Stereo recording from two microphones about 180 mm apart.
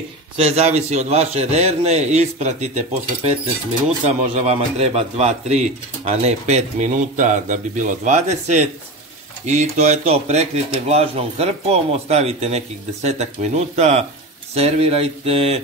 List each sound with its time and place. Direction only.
0.4 s a man's voice: 35° right (ahead or behind)
4.0 s a man's voice: 35° right (ahead or behind)